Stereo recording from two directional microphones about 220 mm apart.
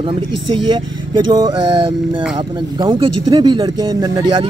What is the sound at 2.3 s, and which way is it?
Speech, 20° right (ahead or behind).